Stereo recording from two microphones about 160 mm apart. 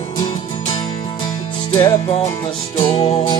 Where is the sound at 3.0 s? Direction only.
40° left (ahead or behind).